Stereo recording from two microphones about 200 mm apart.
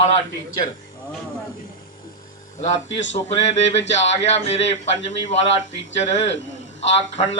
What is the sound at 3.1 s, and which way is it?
Speech, 35° left (ahead or behind).